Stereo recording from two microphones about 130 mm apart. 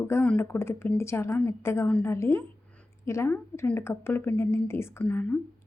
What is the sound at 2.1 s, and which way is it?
A woman's voice, 20° left (ahead or behind).